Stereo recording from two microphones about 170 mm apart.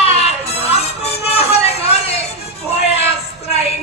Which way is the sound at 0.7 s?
35° left (ahead or behind).